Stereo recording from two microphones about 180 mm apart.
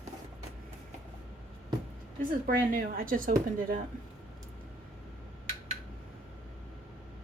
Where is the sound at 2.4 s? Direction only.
50° right (ahead or behind).